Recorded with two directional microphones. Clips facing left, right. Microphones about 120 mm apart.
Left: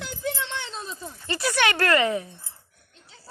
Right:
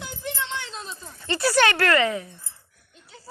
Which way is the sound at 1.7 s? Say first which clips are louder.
Even; 25° left (ahead or behind).